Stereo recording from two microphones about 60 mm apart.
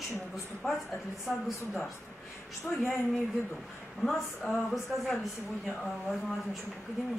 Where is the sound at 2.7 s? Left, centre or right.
Left.